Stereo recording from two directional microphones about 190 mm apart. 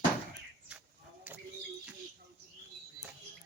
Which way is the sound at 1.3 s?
5° right (ahead or behind).